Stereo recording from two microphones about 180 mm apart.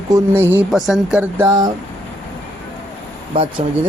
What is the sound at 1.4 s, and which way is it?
Speech, 20° right (ahead or behind).